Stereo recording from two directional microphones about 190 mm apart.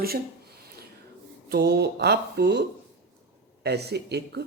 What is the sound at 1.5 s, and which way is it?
Speech, 60° right (ahead or behind).